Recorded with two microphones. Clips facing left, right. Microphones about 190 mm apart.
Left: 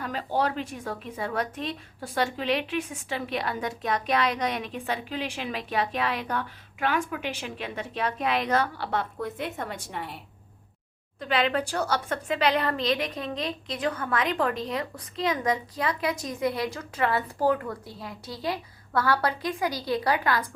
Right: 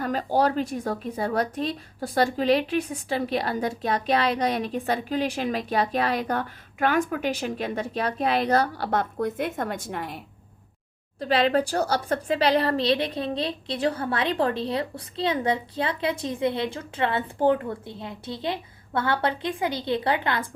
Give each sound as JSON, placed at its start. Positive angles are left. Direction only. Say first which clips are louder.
{"t": 0.0, "sound": "speech", "louder": "right 5 dB", "side_deg": -40}
{"t": 11.2, "sound": "a woman's voice", "louder": "right 4 dB", "side_deg": -35}